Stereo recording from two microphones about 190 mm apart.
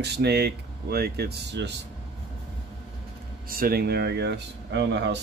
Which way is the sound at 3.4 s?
50° right (ahead or behind).